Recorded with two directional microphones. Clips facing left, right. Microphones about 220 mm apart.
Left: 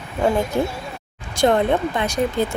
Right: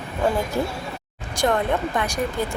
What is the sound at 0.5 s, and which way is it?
Speech, 25° left (ahead or behind).